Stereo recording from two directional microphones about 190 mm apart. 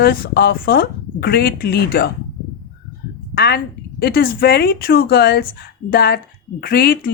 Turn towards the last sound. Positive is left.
turn(degrees=55)  # may be behind; listen again after turning